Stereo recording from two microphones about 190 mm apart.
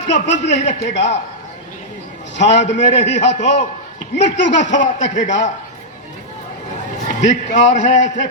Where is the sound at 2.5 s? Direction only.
70° left (ahead or behind).